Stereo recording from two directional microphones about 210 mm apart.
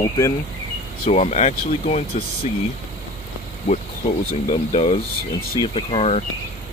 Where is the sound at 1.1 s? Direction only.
30° left (ahead or behind).